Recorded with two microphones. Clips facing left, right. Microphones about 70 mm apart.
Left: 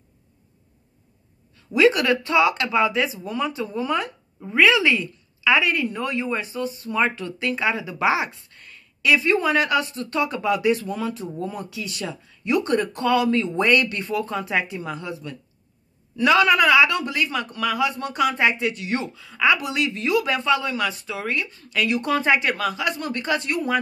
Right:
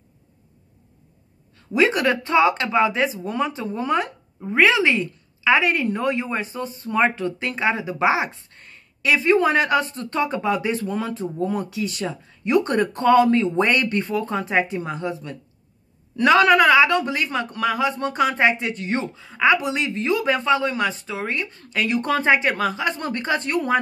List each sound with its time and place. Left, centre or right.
1.7 s a woman's voice: right
21.5 s a woman's voice: right